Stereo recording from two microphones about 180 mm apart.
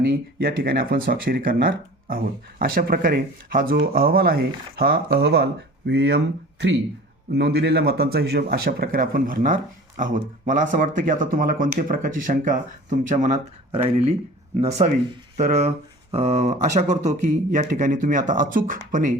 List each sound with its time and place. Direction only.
0.0 s speech: 55° right (ahead or behind)